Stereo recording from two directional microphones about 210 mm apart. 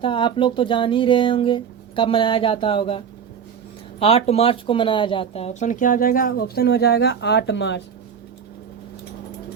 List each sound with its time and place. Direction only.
0.0 s speech: 25° left (ahead or behind)
4.0 s speech: 30° left (ahead or behind); by 7.8 s 55° left (ahead or behind)